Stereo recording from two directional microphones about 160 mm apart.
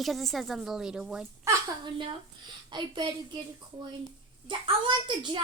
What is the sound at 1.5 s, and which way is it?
Speech, 20° right (ahead or behind).